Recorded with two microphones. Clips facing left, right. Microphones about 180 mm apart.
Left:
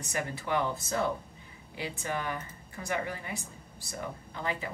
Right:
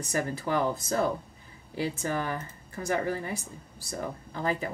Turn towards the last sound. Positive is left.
turn(degrees=-40)  # may be behind; listen again after turning